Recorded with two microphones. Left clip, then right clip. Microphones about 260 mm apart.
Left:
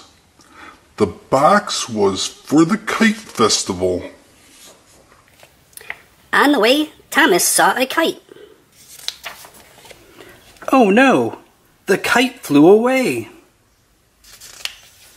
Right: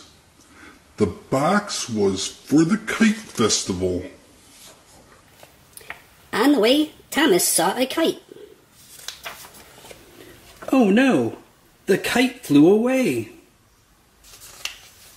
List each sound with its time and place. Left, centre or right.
1.3 s speech: centre
6.3 s a woman's voice: centre
10.6 s a woman's voice: centre